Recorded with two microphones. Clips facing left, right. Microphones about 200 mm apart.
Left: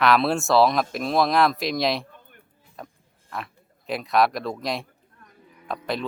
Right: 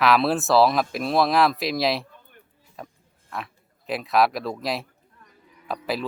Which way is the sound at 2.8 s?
Centre (ahead or behind).